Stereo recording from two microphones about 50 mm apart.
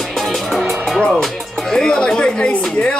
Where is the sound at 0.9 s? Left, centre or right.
Centre.